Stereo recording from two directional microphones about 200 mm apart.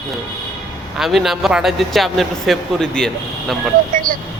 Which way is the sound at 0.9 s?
Centre (ahead or behind).